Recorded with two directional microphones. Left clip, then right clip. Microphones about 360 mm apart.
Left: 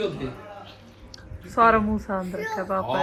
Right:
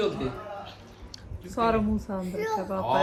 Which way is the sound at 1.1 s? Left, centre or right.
Centre.